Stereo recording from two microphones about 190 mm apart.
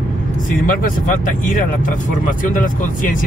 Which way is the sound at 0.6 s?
45° left (ahead or behind).